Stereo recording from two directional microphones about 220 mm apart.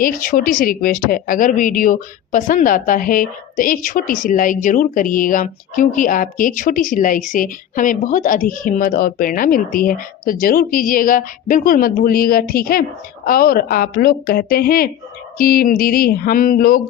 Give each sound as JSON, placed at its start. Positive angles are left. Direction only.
{"t": 0.0, "sound": "speech", "side_deg": 40}